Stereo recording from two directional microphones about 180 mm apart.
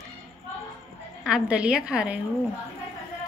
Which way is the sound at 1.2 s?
5° right (ahead or behind).